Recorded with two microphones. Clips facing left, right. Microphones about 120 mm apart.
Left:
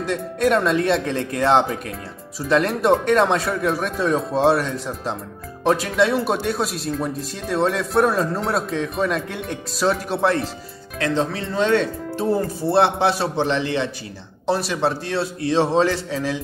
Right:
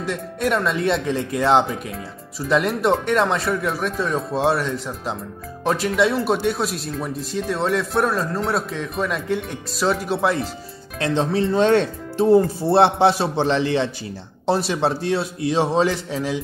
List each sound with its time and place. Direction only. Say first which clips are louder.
0.0 s speech: left 3 dB; 5° right (ahead or behind)
11.0 s speech: right 2 dB; 25° right (ahead or behind)